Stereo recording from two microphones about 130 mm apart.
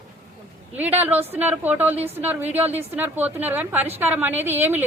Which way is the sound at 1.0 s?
15° right (ahead or behind).